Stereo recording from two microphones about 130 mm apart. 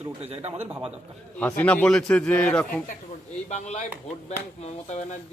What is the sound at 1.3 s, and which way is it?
A man's voice, 10° left (ahead or behind).